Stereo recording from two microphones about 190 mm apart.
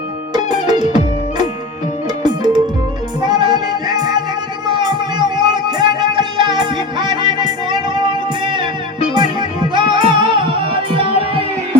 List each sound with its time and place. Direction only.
0.7 s music: 20° right (ahead or behind)